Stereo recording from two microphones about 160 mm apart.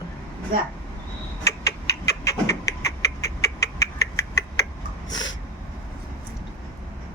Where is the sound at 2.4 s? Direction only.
20° left (ahead or behind).